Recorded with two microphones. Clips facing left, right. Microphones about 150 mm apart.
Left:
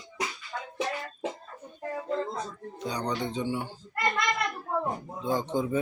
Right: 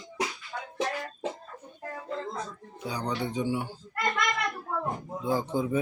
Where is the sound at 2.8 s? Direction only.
10° right (ahead or behind).